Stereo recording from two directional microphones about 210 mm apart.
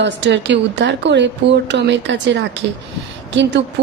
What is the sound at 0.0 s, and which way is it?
A woman's voice, 55° right (ahead or behind).